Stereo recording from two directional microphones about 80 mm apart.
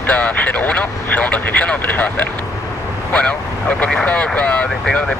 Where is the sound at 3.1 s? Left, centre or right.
Centre.